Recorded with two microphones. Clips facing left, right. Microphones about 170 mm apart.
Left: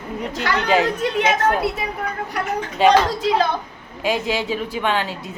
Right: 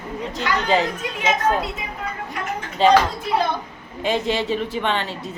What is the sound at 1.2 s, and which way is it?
Speech, 70° left (ahead or behind).